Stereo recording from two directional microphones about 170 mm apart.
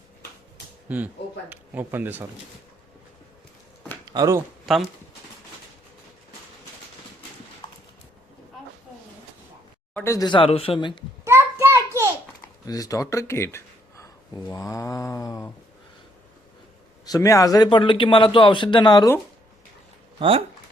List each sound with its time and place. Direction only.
0.9 s speech: 10° right (ahead or behind)
4.1 s speech: 20° right (ahead or behind)
4.6 s speech: centre (ahead or behind)
9.9 s a man's voice: 15° left (ahead or behind)
11.3 s a sound: 15° right (ahead or behind)
12.6 s speech: 20° left (ahead or behind)
17.1 s a man's voice: 20° left (ahead or behind)
20.1 s speech: 30° right (ahead or behind)